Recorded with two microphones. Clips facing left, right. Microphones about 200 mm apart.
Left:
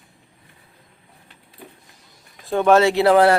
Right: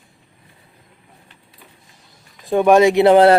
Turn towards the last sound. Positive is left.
turn(degrees=-20)  # may be behind; listen again after turning